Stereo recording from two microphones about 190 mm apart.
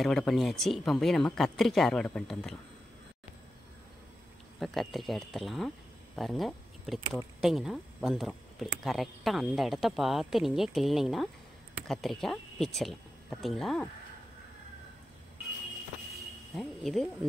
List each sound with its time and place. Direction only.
0.0 s speech: centre (ahead or behind)
4.6 s speech: centre (ahead or behind)
16.5 s speech: centre (ahead or behind)